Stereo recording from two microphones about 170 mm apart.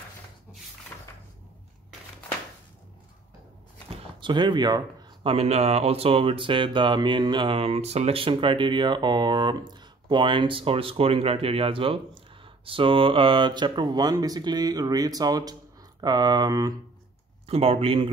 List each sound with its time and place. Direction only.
0.9 s a sound: 10° left (ahead or behind)
3.9 s speech: 30° right (ahead or behind)
17.5 s speech: 35° right (ahead or behind)